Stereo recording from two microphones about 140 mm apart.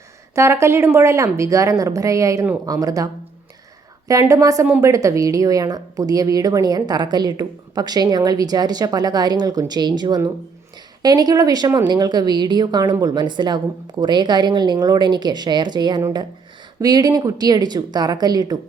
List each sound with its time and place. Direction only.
0.3 s speech: 20° right (ahead or behind)
4.1 s a woman's voice: 25° right (ahead or behind)